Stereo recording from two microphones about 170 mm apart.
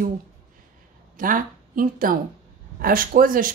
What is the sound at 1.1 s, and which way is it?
A woman's voice, 50° right (ahead or behind).